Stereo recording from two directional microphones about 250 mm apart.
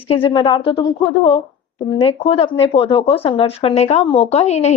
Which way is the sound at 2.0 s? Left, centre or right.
Left.